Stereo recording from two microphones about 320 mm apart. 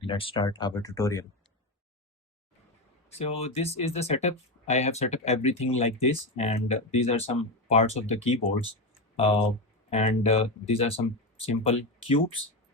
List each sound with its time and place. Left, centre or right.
0.0 s speech: centre
3.1 s speech: centre
9.9 s speech: centre